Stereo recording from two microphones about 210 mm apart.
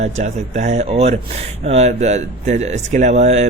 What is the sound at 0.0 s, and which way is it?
Speech, 35° right (ahead or behind).